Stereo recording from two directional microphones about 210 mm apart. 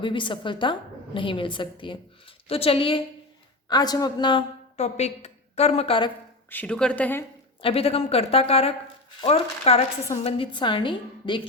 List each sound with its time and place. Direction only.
0.0 s a woman's voice: 25° left (ahead or behind)
6.5 s a woman's voice: 5° left (ahead or behind)
7.6 s a woman's voice: 30° left (ahead or behind)